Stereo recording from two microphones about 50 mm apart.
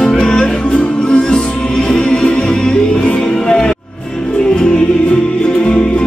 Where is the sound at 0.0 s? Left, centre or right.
Centre.